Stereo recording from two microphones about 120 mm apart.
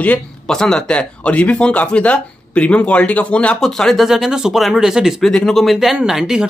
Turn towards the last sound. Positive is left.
turn(degrees=-5)  # may be behind; listen again after turning